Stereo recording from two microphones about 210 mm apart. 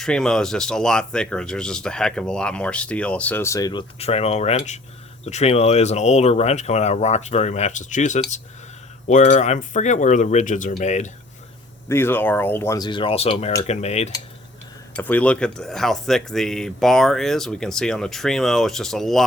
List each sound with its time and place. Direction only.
0.0 s speech: centre (ahead or behind); by 11.1 s 35° left (ahead or behind)
11.9 s speech: 10° left (ahead or behind); by 14.1 s 30° left (ahead or behind)
14.9 s speech: 5° left (ahead or behind)